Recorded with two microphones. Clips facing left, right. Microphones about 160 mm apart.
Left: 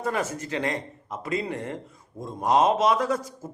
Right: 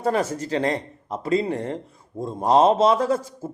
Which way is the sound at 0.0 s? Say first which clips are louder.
Right 5 dB; 35° right (ahead or behind).